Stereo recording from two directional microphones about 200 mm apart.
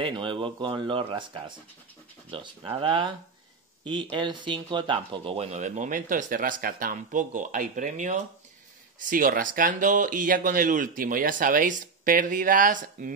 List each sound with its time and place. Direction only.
0.0 s speech: 25° right (ahead or behind); by 13.1 s 40° right (ahead or behind)